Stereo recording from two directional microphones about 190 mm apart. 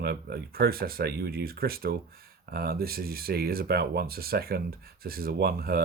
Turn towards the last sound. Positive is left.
turn(degrees=-55)  # may be behind; listen again after turning